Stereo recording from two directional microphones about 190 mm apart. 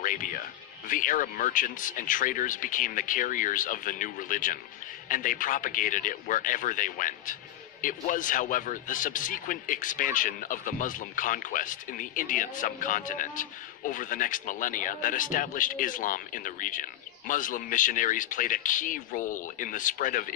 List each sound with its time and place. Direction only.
0.0 s a man's voice: 45° left (ahead or behind)